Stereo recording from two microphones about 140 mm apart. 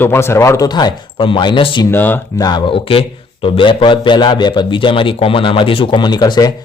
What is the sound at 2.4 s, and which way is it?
Speech, 35° left (ahead or behind).